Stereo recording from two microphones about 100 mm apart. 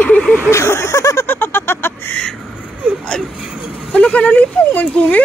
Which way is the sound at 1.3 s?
20° left (ahead or behind).